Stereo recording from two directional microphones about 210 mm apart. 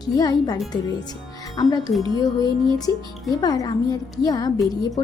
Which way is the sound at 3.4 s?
20° left (ahead or behind).